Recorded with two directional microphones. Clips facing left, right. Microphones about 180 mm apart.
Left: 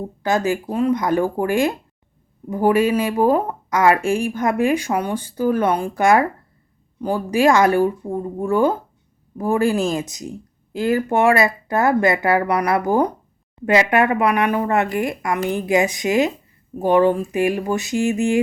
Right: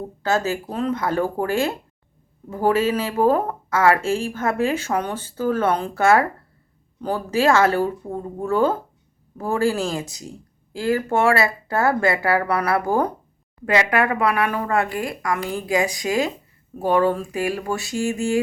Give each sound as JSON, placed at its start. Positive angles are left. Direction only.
{"t": 0.2, "sound": "speech", "side_deg": 15}